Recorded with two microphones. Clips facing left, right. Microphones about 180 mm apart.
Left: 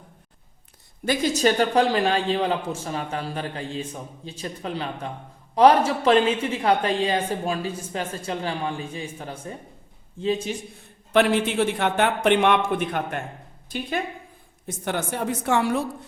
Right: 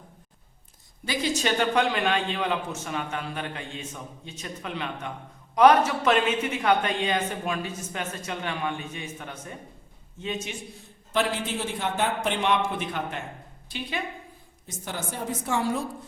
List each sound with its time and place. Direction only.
1.0 s a woman's voice: 50° left (ahead or behind)
1.4 s speech: 40° left (ahead or behind)
11.1 s a man's voice: 65° left (ahead or behind); by 14.0 s 45° left (ahead or behind)
14.7 s a woman's voice: 65° left (ahead or behind)